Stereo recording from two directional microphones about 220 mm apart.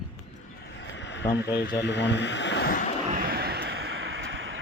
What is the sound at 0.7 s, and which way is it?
Speech, 55° left (ahead or behind).